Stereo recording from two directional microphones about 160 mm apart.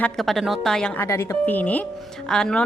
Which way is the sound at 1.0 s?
15° left (ahead or behind).